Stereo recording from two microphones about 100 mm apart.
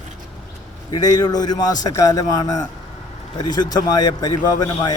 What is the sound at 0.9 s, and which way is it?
A man's voice, 40° left (ahead or behind).